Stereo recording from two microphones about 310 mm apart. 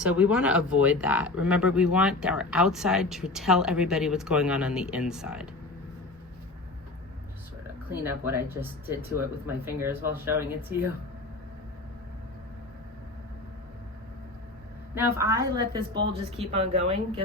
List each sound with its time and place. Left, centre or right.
0.0 s speech: centre
7.9 s a woman's voice: centre
14.9 s a woman's voice: centre